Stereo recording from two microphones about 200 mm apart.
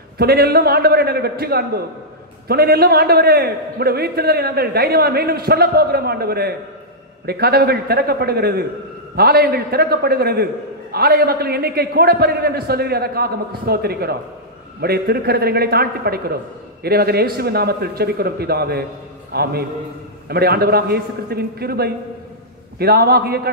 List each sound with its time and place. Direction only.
0.2 s a man's voice: 50° right (ahead or behind)